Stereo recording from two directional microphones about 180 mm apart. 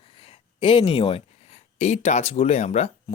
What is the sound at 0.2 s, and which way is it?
Speech, 30° left (ahead or behind).